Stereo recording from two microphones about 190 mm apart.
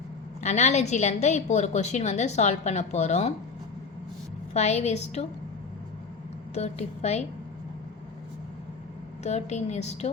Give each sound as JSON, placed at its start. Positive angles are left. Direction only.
{"t": 0.4, "sound": "a woman's voice", "side_deg": 35}
{"t": 4.5, "sound": "a woman's voice", "side_deg": 35}
{"t": 6.5, "sound": "a woman's voice", "side_deg": 35}
{"t": 9.2, "sound": "a woman's voice", "side_deg": 35}